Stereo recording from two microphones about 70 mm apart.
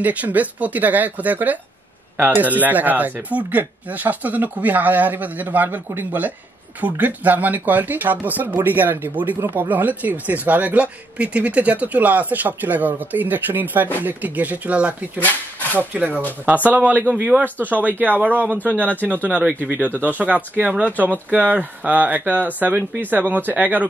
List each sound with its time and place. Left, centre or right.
0.0 s speech: right
15.1 s speech: left
15.9 s speech: right